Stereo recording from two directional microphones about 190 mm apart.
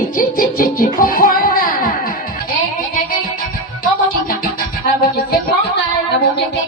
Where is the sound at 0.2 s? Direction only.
50° left (ahead or behind).